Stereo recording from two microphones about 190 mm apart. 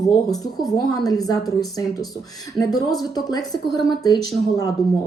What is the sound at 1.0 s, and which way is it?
Speech, 20° left (ahead or behind).